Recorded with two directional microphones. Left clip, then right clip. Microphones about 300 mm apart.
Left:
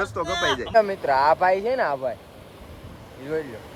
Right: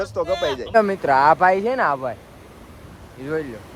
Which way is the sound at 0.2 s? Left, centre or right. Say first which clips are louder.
Right 3 dB; centre.